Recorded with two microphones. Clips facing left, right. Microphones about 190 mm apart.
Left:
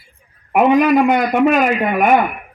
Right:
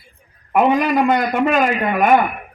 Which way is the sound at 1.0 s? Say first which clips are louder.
Left 3 dB; 5° left (ahead or behind).